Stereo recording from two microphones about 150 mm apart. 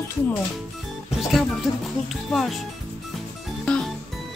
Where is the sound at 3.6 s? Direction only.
5° left (ahead or behind).